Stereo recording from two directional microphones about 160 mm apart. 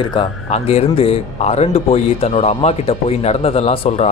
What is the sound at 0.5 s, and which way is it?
Speech, 40° left (ahead or behind).